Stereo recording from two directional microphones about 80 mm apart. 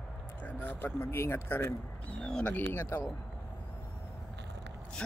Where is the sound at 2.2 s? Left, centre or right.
Centre.